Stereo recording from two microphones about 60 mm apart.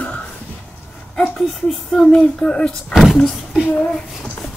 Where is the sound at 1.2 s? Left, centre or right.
Centre.